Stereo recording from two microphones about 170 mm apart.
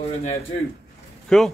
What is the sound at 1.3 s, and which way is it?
Speech, 5° left (ahead or behind).